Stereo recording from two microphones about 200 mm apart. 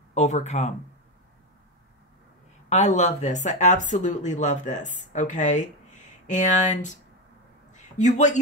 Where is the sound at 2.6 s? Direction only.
35° left (ahead or behind).